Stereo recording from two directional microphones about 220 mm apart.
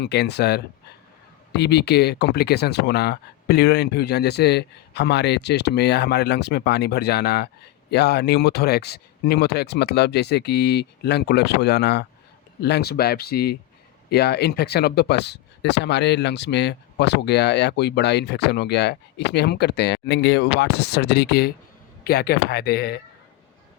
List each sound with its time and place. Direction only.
0.0 s speech: 50° left (ahead or behind)